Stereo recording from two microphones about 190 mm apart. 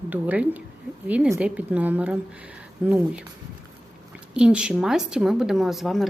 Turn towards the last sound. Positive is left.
turn(degrees=0)  # may be behind; listen again after turning